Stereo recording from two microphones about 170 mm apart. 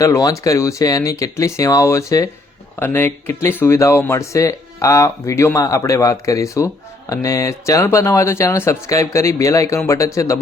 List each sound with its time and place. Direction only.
0.0 s speech: 20° left (ahead or behind)